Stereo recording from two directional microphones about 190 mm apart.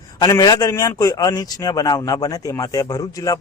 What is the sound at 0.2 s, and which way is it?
Speech, 20° left (ahead or behind).